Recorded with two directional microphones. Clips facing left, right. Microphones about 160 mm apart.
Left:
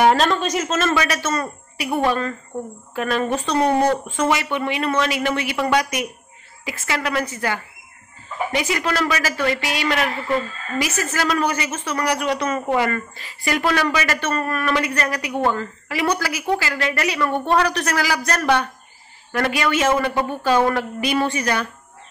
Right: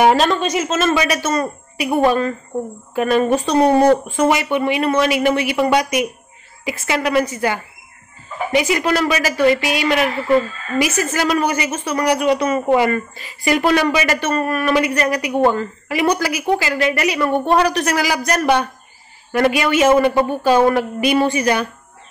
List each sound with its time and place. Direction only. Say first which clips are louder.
0.0 s a woman's voice: right 2 dB; 10° right (ahead or behind)